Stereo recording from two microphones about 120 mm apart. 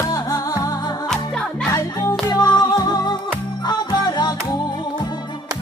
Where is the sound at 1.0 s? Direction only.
5° left (ahead or behind).